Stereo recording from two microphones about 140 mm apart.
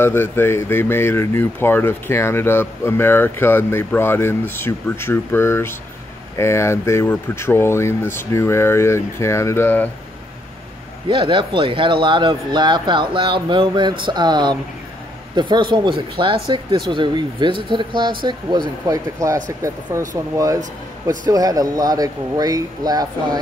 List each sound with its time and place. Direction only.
0.0 s speech: 15° left (ahead or behind)
11.1 s a man's voice: 35° right (ahead or behind)
21.3 s a man's voice: 25° right (ahead or behind)